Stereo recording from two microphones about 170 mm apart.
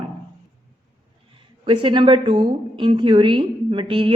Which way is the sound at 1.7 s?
30° right (ahead or behind).